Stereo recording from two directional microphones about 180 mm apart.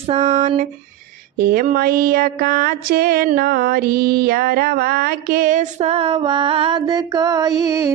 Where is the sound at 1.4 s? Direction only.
55° right (ahead or behind).